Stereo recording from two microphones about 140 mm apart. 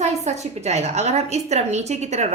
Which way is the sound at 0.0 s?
55° right (ahead or behind).